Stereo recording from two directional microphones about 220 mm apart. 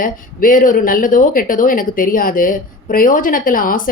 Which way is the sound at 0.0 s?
40° left (ahead or behind).